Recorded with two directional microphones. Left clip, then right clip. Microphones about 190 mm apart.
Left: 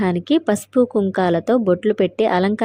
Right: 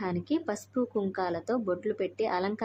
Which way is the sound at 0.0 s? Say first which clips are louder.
Left 13 dB; 35° left (ahead or behind).